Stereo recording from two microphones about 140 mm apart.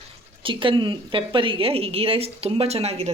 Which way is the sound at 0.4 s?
40° right (ahead or behind).